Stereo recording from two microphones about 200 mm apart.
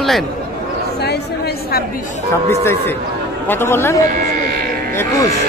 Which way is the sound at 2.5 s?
10° left (ahead or behind).